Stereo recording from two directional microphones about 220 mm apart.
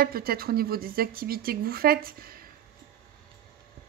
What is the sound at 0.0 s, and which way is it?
Speech, 45° right (ahead or behind).